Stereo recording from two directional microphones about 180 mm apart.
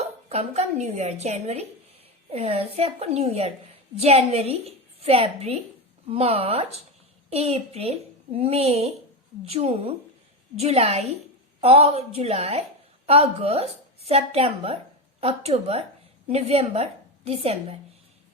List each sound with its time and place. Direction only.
0.0 s a woman's voice: 35° right (ahead or behind)